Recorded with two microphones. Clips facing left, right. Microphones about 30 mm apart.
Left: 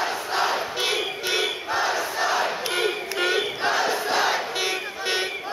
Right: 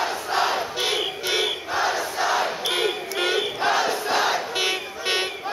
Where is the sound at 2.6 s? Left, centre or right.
Right.